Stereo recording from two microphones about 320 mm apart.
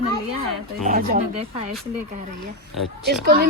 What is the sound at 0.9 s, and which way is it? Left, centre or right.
Speech, right.